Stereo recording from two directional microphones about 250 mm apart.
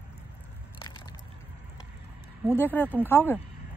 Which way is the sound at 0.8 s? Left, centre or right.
Centre.